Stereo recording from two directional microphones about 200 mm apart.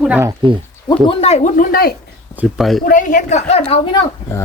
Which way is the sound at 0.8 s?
30° left (ahead or behind).